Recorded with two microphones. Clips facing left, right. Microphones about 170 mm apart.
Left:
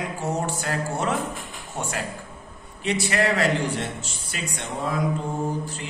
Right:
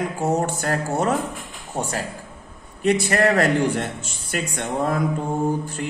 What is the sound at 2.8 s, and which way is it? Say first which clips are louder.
A man's voice: right 5 dB; 50° right (ahead or behind).